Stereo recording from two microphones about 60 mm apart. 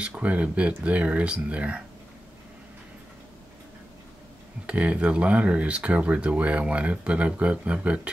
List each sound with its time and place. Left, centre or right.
0.0 s speech: right
4.6 s speech: right